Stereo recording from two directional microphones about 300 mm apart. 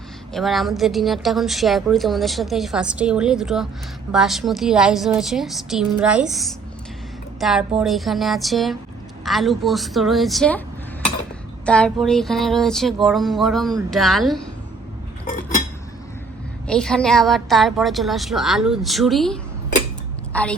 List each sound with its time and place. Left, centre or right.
0.3 s a woman's voice: centre
11.6 s a woman's voice: centre
16.6 s a woman's voice: centre